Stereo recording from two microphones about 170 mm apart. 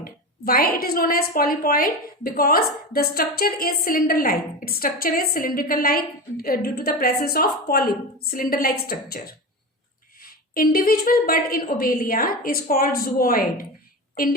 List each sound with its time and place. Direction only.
0.0 s a woman's voice: 60° left (ahead or behind)